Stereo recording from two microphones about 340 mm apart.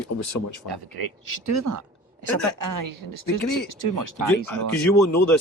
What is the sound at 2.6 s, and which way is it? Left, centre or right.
Speech, right.